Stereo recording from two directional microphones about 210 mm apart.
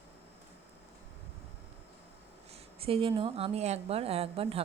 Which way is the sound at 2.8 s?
25° right (ahead or behind).